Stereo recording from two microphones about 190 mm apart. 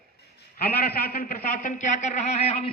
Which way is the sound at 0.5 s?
55° left (ahead or behind).